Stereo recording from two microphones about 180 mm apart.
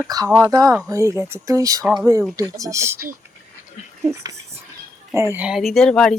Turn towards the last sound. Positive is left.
turn(degrees=5)  # may be behind; listen again after turning